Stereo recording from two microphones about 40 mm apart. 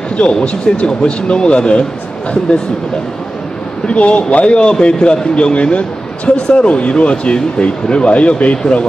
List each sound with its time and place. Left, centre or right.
0.2 s speech: left
3.8 s speech: left